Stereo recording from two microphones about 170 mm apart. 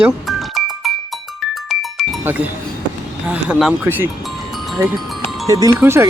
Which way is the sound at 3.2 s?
5° right (ahead or behind).